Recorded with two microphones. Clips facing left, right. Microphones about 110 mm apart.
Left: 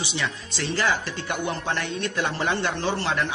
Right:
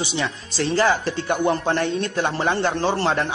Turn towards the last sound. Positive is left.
turn(degrees=-35)  # may be behind; listen again after turning